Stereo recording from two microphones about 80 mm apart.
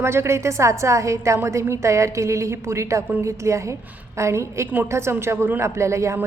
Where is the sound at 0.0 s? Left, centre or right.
Right.